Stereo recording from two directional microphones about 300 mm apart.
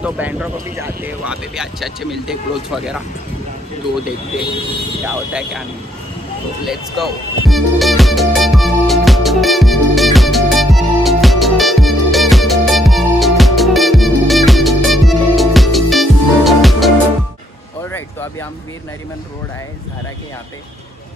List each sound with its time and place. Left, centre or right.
0.0 s speech: centre
5.0 s speech: centre
6.6 s music: centre